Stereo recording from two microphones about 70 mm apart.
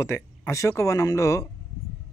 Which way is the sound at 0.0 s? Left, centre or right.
Left.